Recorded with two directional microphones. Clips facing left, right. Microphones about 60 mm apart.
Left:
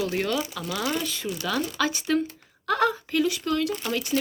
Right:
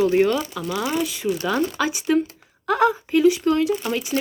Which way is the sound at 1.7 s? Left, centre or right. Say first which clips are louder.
Right 4 dB; centre.